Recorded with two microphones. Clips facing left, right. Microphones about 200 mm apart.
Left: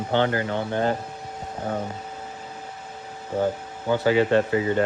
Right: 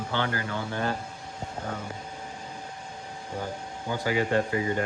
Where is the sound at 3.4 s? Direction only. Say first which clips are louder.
Left 12 dB; 55° left (ahead or behind).